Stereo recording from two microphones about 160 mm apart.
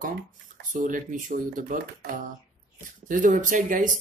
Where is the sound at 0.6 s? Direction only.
55° right (ahead or behind).